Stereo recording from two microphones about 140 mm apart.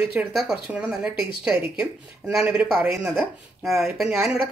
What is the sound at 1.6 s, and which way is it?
Speech, 15° right (ahead or behind).